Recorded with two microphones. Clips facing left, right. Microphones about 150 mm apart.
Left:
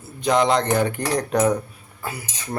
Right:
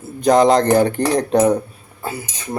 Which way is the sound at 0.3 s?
40° right (ahead or behind).